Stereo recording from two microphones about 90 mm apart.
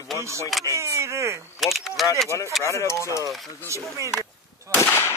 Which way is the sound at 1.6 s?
Centre (ahead or behind).